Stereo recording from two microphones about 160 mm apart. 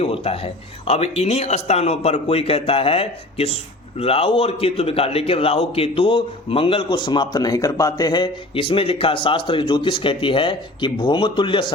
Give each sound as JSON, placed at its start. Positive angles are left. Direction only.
{"t": 0.0, "sound": "speech", "side_deg": 40}